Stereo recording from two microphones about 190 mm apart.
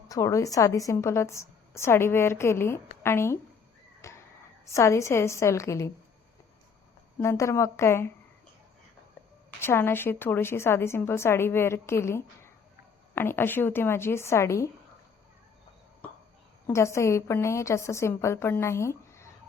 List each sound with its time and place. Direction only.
0.1 s a woman's voice: 15° left (ahead or behind)
4.0 s crow: 15° left (ahead or behind)
4.6 s a woman's voice: 15° left (ahead or behind)
7.2 s a woman's voice: 15° left (ahead or behind)
9.6 s a woman's voice: 10° left (ahead or behind)
16.6 s a woman's voice: 15° left (ahead or behind)